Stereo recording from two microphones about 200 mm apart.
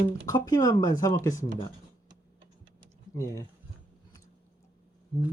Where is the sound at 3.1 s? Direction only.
15° left (ahead or behind).